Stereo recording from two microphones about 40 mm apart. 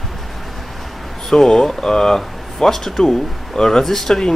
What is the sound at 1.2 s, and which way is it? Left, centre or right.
Speech, centre.